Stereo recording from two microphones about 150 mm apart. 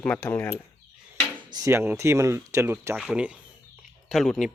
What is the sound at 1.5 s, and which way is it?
Speech, 20° right (ahead or behind).